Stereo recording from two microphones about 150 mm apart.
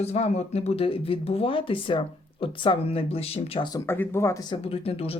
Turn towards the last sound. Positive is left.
turn(degrees=40)  # may be behind; listen again after turning